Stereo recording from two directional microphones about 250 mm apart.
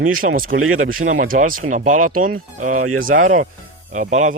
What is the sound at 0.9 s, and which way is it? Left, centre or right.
Speech, right.